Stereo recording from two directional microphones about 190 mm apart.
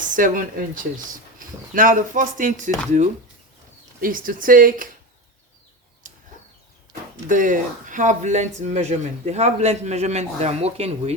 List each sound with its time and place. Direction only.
0.2 s speech: 45° right (ahead or behind)
6.0 s a sound: 45° right (ahead or behind)
7.3 s speech: 45° right (ahead or behind)